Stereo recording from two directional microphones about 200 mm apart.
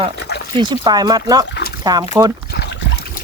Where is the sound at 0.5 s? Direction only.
20° right (ahead or behind).